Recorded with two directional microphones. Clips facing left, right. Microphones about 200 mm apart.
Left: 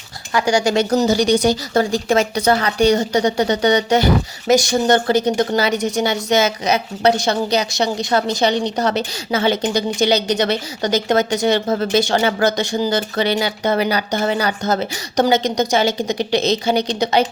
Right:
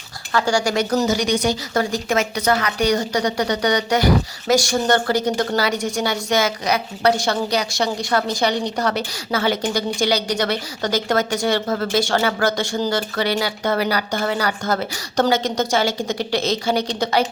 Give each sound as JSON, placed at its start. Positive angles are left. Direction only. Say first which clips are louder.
{"t": 0.3, "sound": "speech", "louder": "left 3 dB", "side_deg": 15}